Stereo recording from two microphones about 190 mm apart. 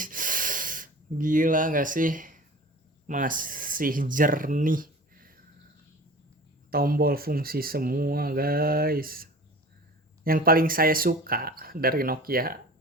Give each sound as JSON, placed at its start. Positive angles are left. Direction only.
{"t": 0.0, "sound": "a sound", "side_deg": -45}
{"t": 3.1, "sound": "speech", "side_deg": -45}
{"t": 6.7, "sound": "speech", "side_deg": -50}